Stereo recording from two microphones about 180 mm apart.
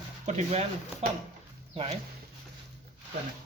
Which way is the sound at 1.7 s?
35° right (ahead or behind).